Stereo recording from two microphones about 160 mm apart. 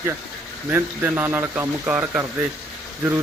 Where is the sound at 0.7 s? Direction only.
10° right (ahead or behind).